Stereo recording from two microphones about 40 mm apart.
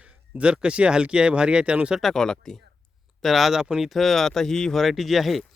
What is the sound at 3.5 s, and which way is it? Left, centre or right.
Speech, centre.